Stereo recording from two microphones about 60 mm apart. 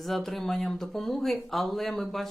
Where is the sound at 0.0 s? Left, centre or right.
Centre.